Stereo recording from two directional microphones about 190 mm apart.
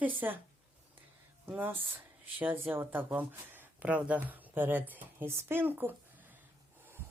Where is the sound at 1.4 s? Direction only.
10° right (ahead or behind).